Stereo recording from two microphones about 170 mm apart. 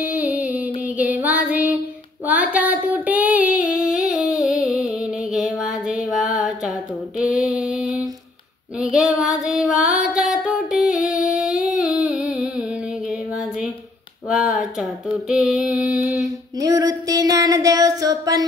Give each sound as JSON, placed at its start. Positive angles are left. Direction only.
{"t": 0.0, "sound": "a sound", "side_deg": -10}
{"t": 0.9, "sound": "music", "side_deg": -10}
{"t": 2.2, "sound": "female singing", "side_deg": -10}
{"t": 5.3, "sound": "music", "side_deg": -5}
{"t": 6.0, "sound": "a sound", "side_deg": 0}
{"t": 8.7, "sound": "female singing", "side_deg": -5}
{"t": 10.0, "sound": "music", "side_deg": -5}
{"t": 11.1, "sound": "humming", "side_deg": 0}
{"t": 11.8, "sound": "music", "side_deg": -5}
{"t": 14.2, "sound": "a sound", "side_deg": -5}
{"t": 16.5, "sound": "female singing", "side_deg": -20}